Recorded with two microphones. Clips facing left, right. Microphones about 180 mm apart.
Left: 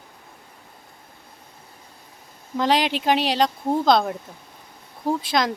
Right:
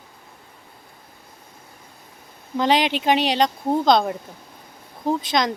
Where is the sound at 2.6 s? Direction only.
Centre (ahead or behind).